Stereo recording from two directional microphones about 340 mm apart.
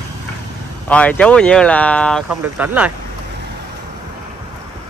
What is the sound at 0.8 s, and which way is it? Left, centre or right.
Speech, centre.